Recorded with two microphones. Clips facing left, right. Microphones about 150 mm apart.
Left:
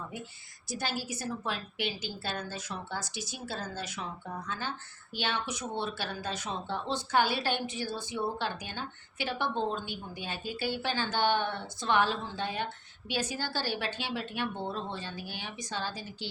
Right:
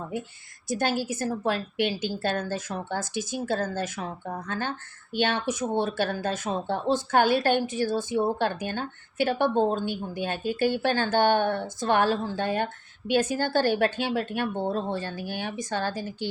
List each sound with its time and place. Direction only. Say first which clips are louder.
0.7 s speech: right 9 dB; 50° right (ahead or behind)